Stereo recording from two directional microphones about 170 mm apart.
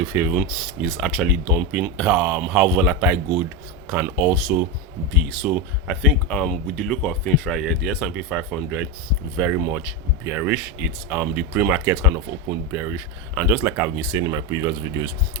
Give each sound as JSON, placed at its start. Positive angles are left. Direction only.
{"t": 0.1, "sound": "speech", "side_deg": -10}